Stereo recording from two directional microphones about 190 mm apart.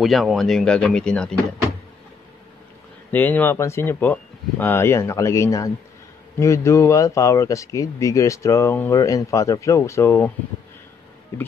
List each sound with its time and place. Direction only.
0.0 s speech: centre (ahead or behind)
3.1 s speech: 10° left (ahead or behind)